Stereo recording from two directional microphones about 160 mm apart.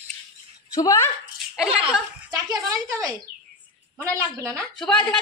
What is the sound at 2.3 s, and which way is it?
Speech, 20° right (ahead or behind).